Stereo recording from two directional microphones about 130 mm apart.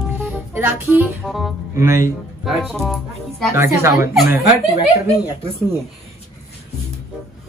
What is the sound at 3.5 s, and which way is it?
Speech, 20° right (ahead or behind).